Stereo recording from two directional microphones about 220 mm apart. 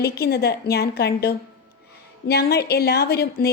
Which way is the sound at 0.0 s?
45° left (ahead or behind).